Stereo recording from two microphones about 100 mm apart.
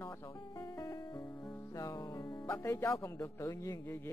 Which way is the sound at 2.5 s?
25° left (ahead or behind).